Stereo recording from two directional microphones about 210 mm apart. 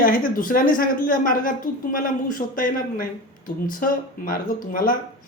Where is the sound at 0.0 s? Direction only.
40° left (ahead or behind).